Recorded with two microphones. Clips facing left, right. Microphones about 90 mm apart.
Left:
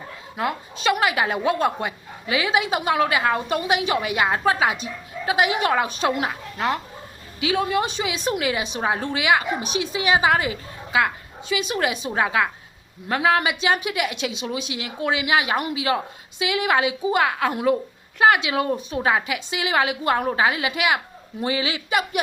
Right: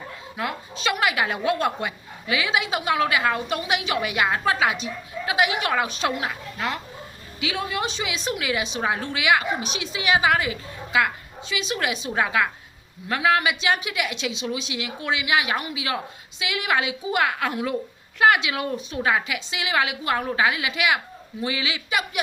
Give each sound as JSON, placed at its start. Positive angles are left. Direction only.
{"t": 0.3, "sound": "a woman's voice", "side_deg": 35}
{"t": 12.1, "sound": "a woman's voice", "side_deg": 25}
{"t": 17.5, "sound": "a woman's voice", "side_deg": 45}